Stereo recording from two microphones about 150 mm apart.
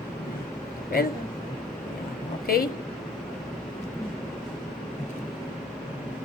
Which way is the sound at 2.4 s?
85° left.